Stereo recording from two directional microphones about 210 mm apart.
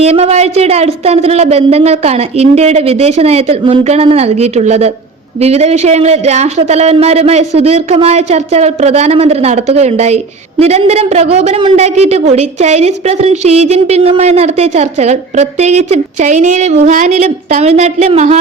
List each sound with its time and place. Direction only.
0.0 s a woman's voice: 30° right (ahead or behind)